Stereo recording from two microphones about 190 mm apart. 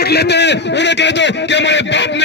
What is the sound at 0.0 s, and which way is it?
A man's voice, 60° left (ahead or behind).